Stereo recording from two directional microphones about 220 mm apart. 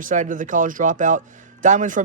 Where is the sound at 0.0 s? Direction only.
35° right (ahead or behind).